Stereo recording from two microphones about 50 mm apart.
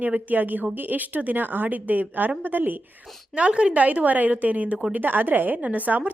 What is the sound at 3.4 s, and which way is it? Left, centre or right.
A woman's voice, right.